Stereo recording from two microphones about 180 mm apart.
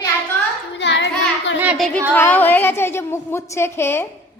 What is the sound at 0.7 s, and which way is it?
Child singing, 80° left.